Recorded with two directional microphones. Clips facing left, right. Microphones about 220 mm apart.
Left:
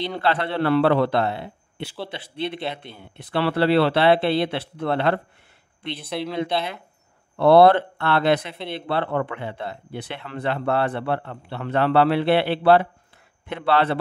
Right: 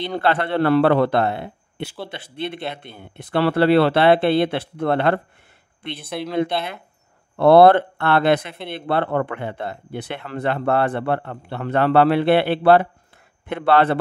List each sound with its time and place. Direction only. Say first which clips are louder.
0.0 s speech: right 2 dB; 50° right (ahead or behind)
6.2 s speech: right 4 dB; 50° right (ahead or behind)